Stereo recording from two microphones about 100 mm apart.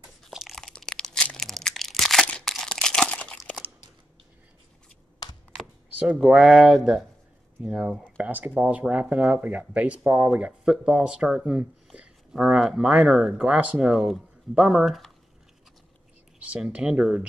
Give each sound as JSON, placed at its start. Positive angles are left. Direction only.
{"t": 0.2, "sound": "crunch", "side_deg": 0}
{"t": 5.2, "sound": "a sound", "side_deg": 45}
{"t": 5.9, "sound": "speech", "side_deg": -15}
{"t": 16.3, "sound": "speech", "side_deg": -10}